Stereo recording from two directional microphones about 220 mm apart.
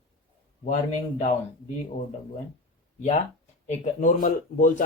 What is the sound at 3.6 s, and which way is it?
Speech, 35° left (ahead or behind).